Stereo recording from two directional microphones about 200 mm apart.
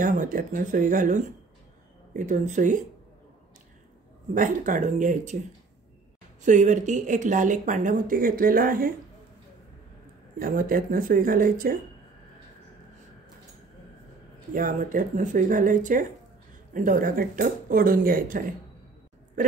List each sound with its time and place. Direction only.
0.0 s speech: 40° right (ahead or behind)
4.3 s speech: 40° right (ahead or behind)
6.4 s speech: 40° right (ahead or behind)
10.4 s speech: 45° right (ahead or behind)
14.5 s speech: 40° right (ahead or behind)